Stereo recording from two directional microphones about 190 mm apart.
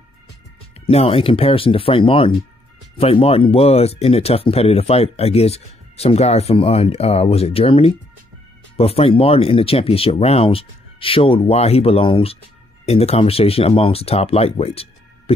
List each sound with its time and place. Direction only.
0.7 s speech: 30° left (ahead or behind)